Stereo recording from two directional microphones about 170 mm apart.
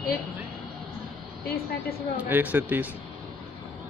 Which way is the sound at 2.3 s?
10° right (ahead or behind).